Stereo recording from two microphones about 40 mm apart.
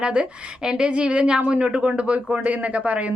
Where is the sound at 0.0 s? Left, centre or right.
Right.